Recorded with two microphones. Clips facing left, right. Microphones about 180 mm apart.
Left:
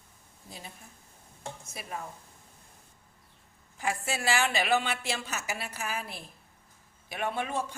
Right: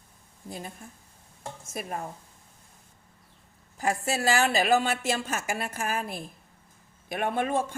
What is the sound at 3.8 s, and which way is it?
A woman's voice, 40° right (ahead or behind).